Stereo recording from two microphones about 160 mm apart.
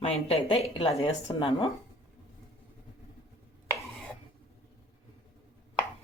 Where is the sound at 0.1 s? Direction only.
35° left (ahead or behind).